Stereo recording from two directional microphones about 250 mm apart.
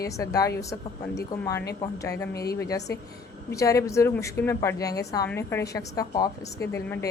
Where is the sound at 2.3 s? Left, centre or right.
Left.